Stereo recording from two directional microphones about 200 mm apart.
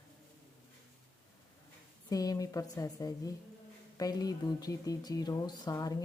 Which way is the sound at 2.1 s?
20° left (ahead or behind).